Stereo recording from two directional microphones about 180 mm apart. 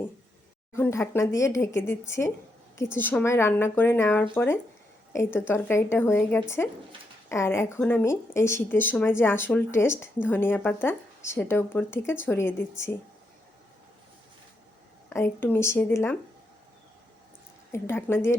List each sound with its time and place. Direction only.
0.8 s speech: 15° left (ahead or behind)
15.1 s speech: 10° left (ahead or behind)
17.7 s speech: 15° left (ahead or behind)